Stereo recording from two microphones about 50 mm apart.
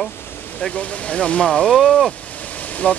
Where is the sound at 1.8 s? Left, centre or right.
Centre.